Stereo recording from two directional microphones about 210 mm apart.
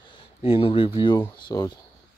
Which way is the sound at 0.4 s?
25° left (ahead or behind).